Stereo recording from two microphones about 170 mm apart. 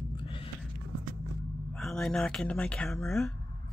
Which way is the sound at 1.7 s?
Centre (ahead or behind).